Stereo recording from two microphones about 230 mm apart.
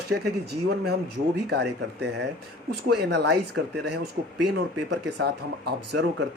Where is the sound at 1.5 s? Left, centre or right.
Right.